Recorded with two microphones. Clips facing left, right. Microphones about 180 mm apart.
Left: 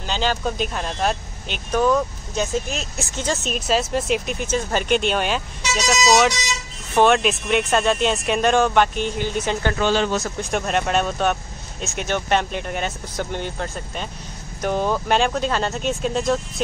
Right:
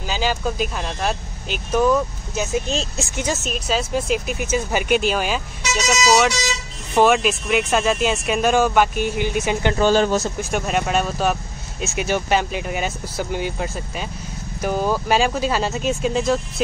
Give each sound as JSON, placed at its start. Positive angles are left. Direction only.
{"t": 0.0, "sound": "speech", "side_deg": -5}
{"t": 2.6, "sound": "speech", "side_deg": -30}
{"t": 3.0, "sound": "speech", "side_deg": -15}
{"t": 3.4, "sound": "speech", "side_deg": 0}
{"t": 9.8, "sound": "speech", "side_deg": -40}
{"t": 10.4, "sound": "speech", "side_deg": 0}